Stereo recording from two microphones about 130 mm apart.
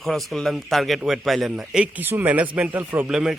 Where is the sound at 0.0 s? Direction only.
Centre (ahead or behind); by 3.1 s 15° right (ahead or behind).